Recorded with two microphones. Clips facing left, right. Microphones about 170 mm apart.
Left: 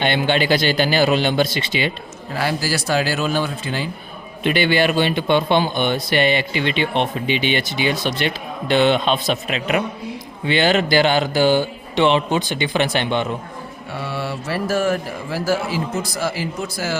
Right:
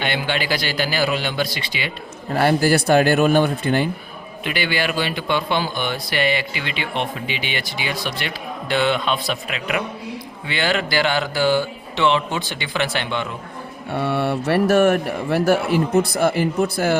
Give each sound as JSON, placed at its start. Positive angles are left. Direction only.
{"t": 0.0, "sound": "a man's voice", "side_deg": 25}
{"t": 2.3, "sound": "speech", "side_deg": -55}
{"t": 4.4, "sound": "a man's voice", "side_deg": 25}
{"t": 13.9, "sound": "speech", "side_deg": -60}